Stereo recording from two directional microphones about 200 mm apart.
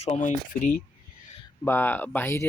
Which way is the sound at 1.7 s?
10° left (ahead or behind).